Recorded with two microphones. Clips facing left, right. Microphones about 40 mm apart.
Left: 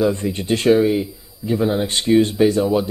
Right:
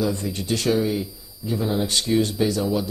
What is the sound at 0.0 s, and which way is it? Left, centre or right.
A man's voice, left.